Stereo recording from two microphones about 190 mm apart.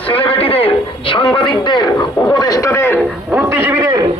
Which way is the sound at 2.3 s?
20° left (ahead or behind).